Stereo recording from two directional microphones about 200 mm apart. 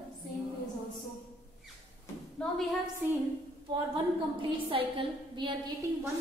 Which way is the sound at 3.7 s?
20° right (ahead or behind).